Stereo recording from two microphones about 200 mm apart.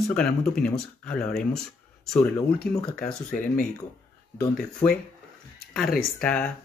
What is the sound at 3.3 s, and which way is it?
Speech, 40° left (ahead or behind).